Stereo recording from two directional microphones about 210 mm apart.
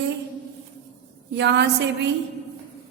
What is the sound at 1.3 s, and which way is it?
Speech, 55° right (ahead or behind).